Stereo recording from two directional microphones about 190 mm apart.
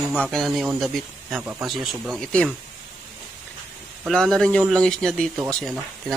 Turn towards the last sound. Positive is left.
turn(degrees=0)  # may be behind; listen again after turning